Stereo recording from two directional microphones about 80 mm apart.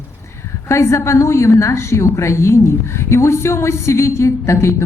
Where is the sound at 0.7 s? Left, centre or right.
Left.